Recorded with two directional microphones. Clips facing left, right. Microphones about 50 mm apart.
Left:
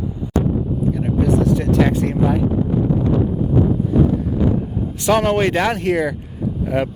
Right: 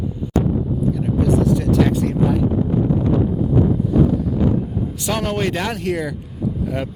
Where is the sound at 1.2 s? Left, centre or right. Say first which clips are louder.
Even; left.